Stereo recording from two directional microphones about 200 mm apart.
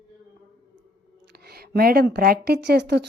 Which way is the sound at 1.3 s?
50° right (ahead or behind).